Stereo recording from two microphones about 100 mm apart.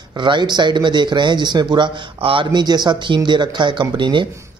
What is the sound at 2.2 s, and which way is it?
Speech, 65° right (ahead or behind).